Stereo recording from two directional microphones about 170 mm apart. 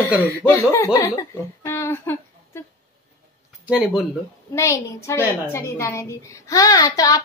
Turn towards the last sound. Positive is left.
turn(degrees=20)  # may be behind; listen again after turning